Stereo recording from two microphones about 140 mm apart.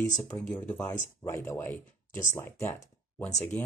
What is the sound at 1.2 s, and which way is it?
Speech, 20° left (ahead or behind).